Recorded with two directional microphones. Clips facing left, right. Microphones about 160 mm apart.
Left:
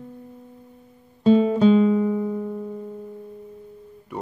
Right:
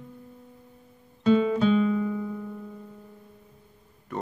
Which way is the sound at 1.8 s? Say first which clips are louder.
Left 6 dB; 30° left (ahead or behind).